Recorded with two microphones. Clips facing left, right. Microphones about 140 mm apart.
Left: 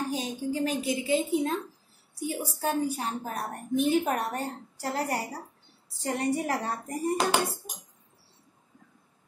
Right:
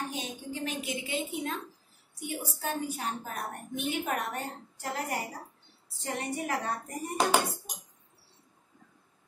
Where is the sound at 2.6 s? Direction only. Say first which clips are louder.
Left 6 dB; 35° left (ahead or behind).